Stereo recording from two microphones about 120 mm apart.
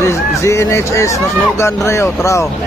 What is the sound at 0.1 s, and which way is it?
Speech, 25° left (ahead or behind).